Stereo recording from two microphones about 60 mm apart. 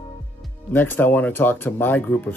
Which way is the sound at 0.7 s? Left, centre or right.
Left.